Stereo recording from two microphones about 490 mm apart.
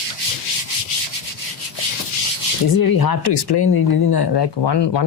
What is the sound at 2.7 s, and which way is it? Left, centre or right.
Speech, left.